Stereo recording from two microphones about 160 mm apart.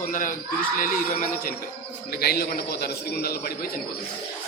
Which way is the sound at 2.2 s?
75° left (ahead or behind).